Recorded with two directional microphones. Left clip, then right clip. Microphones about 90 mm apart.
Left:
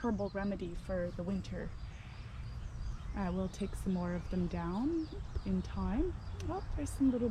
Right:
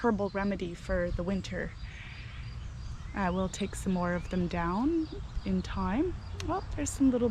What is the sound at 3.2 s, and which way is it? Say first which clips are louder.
Speech: right 8 dB; 35° left (ahead or behind).